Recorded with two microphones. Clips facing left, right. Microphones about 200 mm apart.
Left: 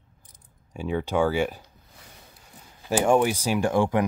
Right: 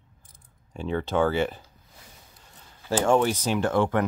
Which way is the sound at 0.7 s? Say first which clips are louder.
Left 1 dB; 10° left (ahead or behind).